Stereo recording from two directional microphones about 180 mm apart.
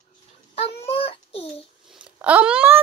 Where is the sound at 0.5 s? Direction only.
30° left (ahead or behind).